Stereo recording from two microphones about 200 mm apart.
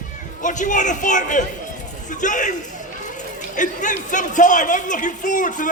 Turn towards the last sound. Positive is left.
turn(degrees=40)  # may be behind; listen again after turning